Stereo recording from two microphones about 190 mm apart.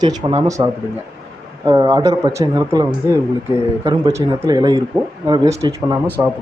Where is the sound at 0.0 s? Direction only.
20° right (ahead or behind).